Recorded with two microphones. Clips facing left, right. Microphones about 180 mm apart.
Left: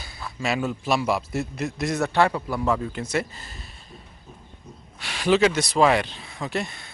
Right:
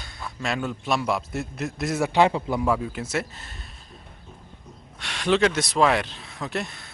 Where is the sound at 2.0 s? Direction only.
20° right (ahead or behind).